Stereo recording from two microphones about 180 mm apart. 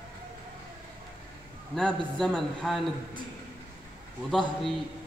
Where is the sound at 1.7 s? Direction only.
5° left (ahead or behind).